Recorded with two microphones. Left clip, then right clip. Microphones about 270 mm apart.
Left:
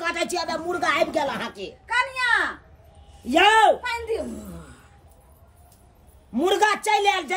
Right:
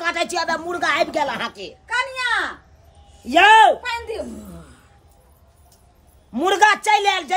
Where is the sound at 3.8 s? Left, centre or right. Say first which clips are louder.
Even; right.